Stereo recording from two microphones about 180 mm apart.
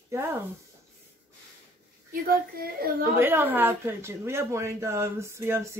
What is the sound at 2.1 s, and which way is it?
Speech, 55° right (ahead or behind).